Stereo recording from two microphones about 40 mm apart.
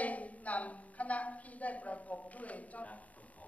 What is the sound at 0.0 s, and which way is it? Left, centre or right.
A woman's voice, left.